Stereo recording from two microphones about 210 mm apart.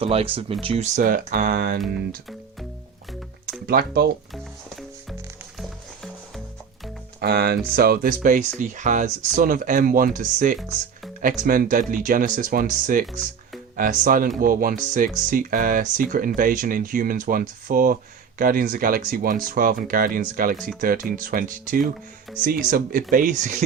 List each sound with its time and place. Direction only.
0.0 s speech: 25° right (ahead or behind); by 1.8 s 45° right (ahead or behind)
3.7 s speech: 45° right (ahead or behind)
5.5 s music: centre (ahead or behind)
7.2 s speech: 50° right (ahead or behind)